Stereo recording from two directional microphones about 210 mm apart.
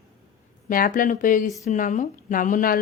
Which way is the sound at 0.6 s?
40° left (ahead or behind).